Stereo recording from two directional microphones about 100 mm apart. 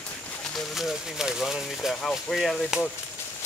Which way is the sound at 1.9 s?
5° left (ahead or behind).